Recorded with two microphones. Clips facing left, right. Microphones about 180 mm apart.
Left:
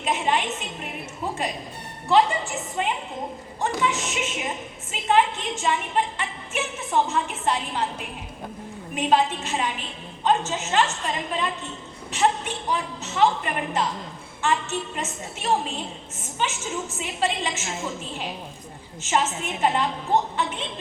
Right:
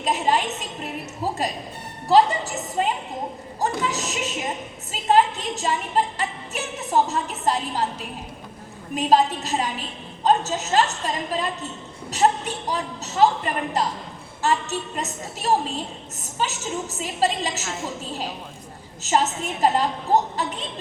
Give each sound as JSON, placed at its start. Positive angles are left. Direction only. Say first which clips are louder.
{"t": 0.0, "sound": "a woman's voice", "louder": "right 2 dB", "side_deg": -35}
{"t": 1.2, "sound": "music", "louder": "right 3 dB", "side_deg": -35}
{"t": 2.0, "sound": "a woman's voice", "louder": "right 2 dB", "side_deg": -35}
{"t": 9.0, "sound": "a woman's voice", "louder": "right 2 dB", "side_deg": -40}
{"t": 17.0, "sound": "a woman's voice", "louder": "right 3 dB", "side_deg": -35}
{"t": 19.0, "sound": "a woman's voice", "louder": "right 2 dB", "side_deg": -40}